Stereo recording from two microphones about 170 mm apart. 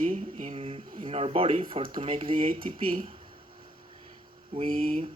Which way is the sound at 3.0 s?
35° right (ahead or behind).